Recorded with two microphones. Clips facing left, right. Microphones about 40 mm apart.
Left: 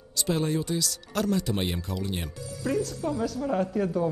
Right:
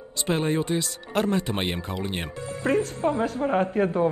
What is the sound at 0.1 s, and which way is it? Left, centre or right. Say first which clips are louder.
Speech: right 2 dB; right.